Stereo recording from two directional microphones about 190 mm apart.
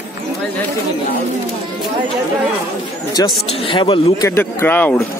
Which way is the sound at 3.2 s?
20° left (ahead or behind).